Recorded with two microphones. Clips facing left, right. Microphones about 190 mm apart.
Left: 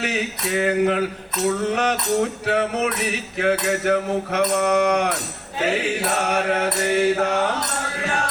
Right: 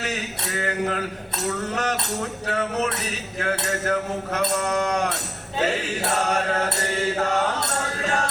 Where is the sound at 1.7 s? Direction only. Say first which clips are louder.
Left 6 dB; 65° left (ahead or behind).